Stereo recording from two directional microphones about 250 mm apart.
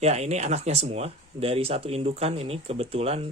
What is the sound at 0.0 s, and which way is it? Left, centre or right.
Speech, right.